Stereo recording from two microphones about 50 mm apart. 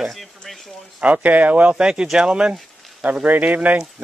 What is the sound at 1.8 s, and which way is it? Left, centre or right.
Speech, centre.